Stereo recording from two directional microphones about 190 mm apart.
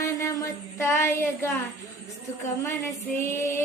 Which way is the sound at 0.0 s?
15° left (ahead or behind).